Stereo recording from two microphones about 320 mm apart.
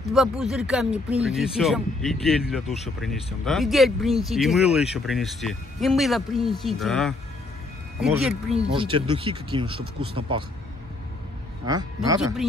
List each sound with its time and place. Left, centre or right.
0.1 s speech: centre
8.7 s speech: centre
11.6 s speech: centre
12.2 s speech: centre